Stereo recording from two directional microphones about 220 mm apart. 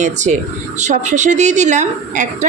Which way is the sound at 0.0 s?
35° right (ahead or behind).